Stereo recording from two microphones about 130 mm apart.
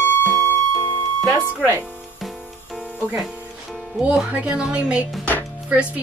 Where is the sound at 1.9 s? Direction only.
Centre (ahead or behind).